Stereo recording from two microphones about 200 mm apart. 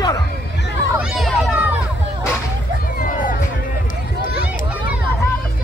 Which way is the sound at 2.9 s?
45° left (ahead or behind).